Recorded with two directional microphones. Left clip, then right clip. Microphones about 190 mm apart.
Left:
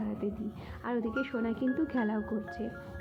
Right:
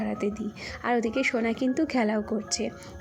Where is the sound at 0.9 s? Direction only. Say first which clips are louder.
Right 8 dB; 20° right (ahead or behind).